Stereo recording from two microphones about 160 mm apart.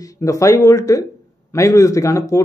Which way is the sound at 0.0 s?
20° left (ahead or behind).